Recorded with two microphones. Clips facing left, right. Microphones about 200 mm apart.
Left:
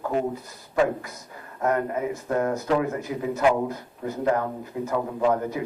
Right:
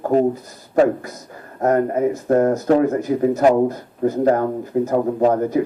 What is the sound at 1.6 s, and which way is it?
A man's voice, 40° right (ahead or behind).